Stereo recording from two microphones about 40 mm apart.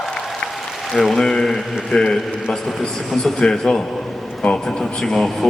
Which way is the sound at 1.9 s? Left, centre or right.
Centre.